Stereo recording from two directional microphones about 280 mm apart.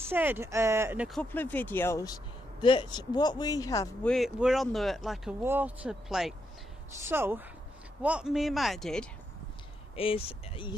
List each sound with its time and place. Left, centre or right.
0.1 s speech: centre
4.1 s speech: centre
9.9 s speech: centre